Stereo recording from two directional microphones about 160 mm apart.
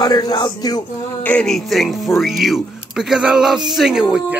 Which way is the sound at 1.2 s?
5° left (ahead or behind).